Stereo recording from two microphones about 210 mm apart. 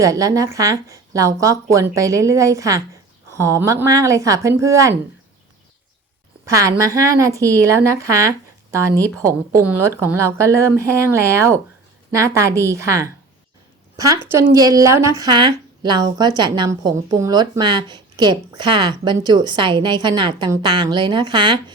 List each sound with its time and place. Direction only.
0.0 s speech: 15° right (ahead or behind)
6.4 s speech: 15° right (ahead or behind)